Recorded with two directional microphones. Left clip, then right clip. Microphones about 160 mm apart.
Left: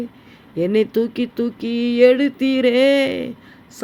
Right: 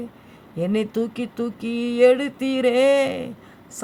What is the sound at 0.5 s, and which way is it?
Speech, 25° left (ahead or behind).